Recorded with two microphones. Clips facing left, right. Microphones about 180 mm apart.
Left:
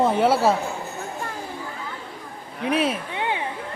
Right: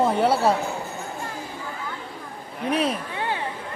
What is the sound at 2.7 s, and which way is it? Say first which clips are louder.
Speech: left 1 dB; centre (ahead or behind).